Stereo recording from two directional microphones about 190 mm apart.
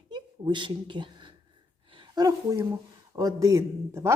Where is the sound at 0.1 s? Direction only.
25° right (ahead or behind).